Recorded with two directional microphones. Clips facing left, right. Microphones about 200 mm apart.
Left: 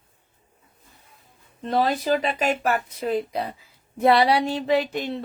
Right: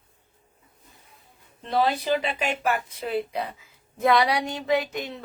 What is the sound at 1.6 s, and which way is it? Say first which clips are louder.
Speech: left 2 dB; 40° left (ahead or behind).